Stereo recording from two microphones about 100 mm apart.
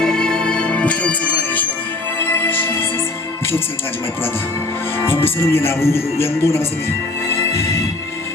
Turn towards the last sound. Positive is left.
turn(degrees=30)  # may be behind; listen again after turning